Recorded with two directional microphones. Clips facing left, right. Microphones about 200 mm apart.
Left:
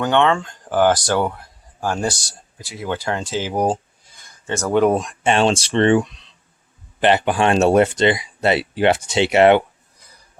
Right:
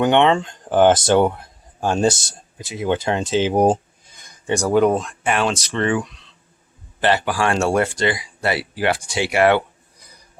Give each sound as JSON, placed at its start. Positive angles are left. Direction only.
{"t": 0.0, "sound": "speech", "side_deg": -20}
{"t": 4.2, "sound": "a sound", "side_deg": -15}
{"t": 4.7, "sound": "speech", "side_deg": 0}
{"t": 5.2, "sound": "speech", "side_deg": 25}